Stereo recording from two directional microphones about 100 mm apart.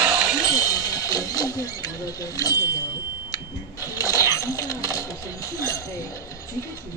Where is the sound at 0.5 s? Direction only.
35° left (ahead or behind).